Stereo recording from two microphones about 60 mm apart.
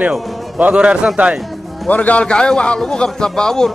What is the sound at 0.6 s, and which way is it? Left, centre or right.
Speech, right.